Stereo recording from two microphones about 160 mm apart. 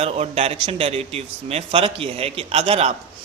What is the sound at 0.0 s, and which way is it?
A man's voice, 40° right (ahead or behind).